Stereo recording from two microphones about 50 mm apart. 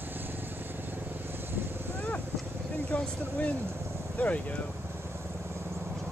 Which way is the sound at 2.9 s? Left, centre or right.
Left.